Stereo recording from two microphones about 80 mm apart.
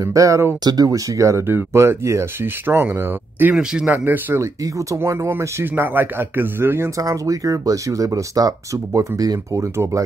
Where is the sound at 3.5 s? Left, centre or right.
Centre.